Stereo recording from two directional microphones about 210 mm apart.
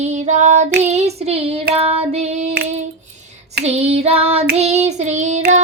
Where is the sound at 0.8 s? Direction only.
30° right (ahead or behind).